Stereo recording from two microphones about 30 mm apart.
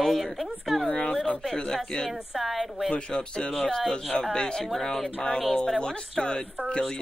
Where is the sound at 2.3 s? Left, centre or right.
Centre.